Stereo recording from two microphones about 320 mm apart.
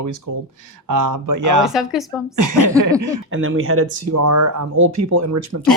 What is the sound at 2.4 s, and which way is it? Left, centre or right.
Speech, right.